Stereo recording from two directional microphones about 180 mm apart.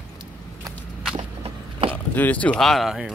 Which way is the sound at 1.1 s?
30° right (ahead or behind).